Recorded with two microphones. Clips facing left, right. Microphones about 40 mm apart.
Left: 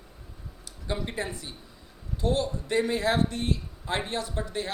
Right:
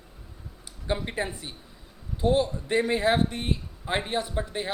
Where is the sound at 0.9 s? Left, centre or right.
Right.